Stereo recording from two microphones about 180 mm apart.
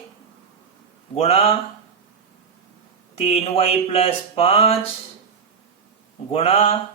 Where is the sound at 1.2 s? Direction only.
35° left (ahead or behind).